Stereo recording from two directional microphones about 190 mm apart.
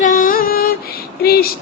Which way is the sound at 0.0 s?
45° left (ahead or behind).